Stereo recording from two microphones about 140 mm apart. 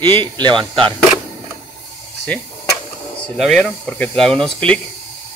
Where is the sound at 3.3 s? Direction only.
5° left (ahead or behind).